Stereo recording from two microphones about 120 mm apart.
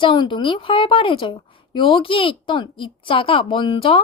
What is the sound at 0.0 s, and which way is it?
A woman's voice, 45° left (ahead or behind).